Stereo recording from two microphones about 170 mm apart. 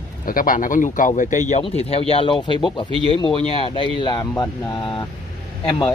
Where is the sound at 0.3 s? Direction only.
55° left (ahead or behind).